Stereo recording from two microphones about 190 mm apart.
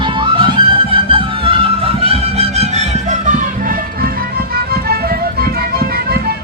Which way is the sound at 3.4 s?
45° right (ahead or behind).